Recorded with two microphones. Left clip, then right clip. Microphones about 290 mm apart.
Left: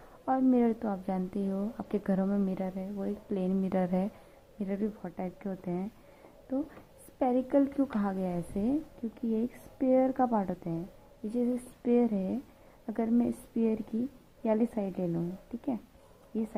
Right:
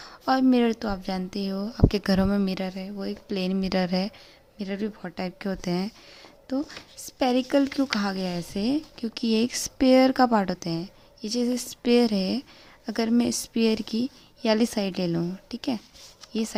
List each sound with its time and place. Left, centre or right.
0.3 s speech: right